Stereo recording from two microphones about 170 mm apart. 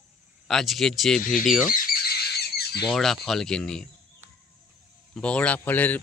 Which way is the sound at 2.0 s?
70° left (ahead or behind).